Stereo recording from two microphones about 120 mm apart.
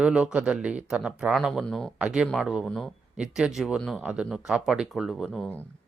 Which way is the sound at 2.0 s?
5° right (ahead or behind).